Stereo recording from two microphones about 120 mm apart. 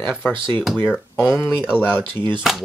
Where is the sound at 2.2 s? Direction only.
40° right (ahead or behind).